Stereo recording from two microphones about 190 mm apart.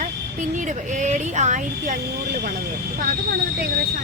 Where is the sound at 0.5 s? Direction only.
40° right (ahead or behind).